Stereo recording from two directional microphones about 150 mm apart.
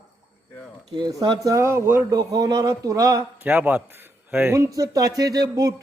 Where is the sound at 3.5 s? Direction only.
10° right (ahead or behind).